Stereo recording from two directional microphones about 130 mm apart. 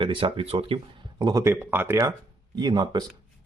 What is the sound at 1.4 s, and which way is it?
Speech, 15° right (ahead or behind).